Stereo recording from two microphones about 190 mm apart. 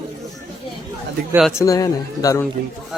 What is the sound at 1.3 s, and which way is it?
Music, 5° right (ahead or behind).